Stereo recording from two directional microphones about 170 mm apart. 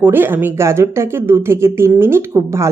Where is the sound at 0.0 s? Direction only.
10° right (ahead or behind).